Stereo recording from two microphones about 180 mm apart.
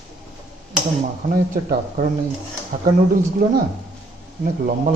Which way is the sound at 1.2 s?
50° right (ahead or behind).